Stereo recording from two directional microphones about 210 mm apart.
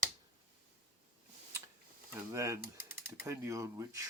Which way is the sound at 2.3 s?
15° right (ahead or behind).